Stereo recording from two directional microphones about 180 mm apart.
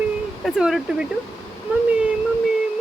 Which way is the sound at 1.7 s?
5° right (ahead or behind).